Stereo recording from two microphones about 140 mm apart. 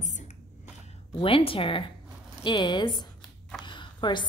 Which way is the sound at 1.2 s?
40° left (ahead or behind).